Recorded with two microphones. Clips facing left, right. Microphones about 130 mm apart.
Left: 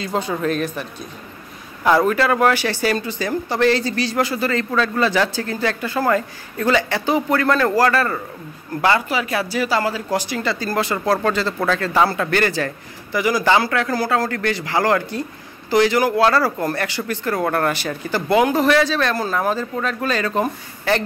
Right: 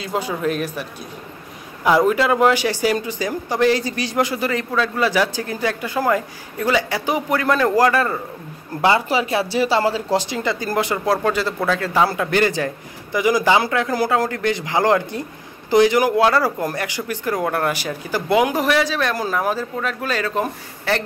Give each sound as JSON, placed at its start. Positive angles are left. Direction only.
{"t": 0.0, "sound": "speech", "side_deg": -10}
{"t": 1.9, "sound": "speech", "side_deg": -15}
{"t": 9.1, "sound": "speech", "side_deg": -25}